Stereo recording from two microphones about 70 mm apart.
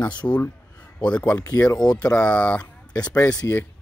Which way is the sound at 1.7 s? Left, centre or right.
Left.